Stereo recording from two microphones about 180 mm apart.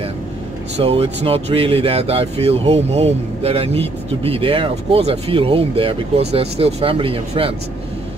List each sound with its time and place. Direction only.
0.7 s speech: 35° right (ahead or behind)